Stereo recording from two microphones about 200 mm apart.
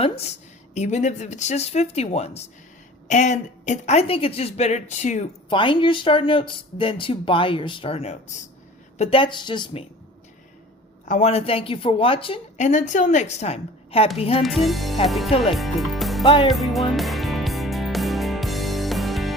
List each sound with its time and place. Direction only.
0.0 s speech: 30° left (ahead or behind)
5.5 s speech: 25° left (ahead or behind)
11.1 s a woman's voice: 30° left (ahead or behind)
14.4 s speech: centre (ahead or behind)
16.2 s speech: 25° left (ahead or behind)
16.5 s speech: centre (ahead or behind)
16.9 s music: centre (ahead or behind)